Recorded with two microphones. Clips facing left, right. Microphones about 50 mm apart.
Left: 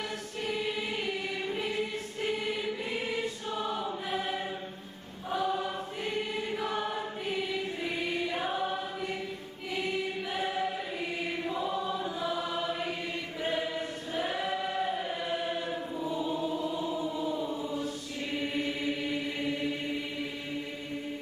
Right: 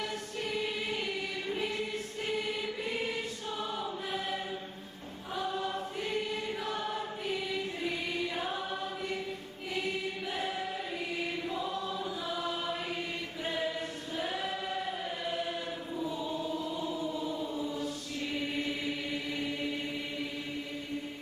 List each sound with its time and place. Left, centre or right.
0.4 s choir: centre
10.3 s choir: centre
17.5 s chant: left
17.8 s chant: centre